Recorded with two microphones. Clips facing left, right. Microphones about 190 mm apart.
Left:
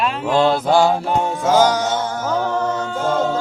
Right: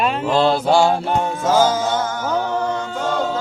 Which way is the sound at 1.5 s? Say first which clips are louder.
Left 1 dB; 15° left (ahead or behind).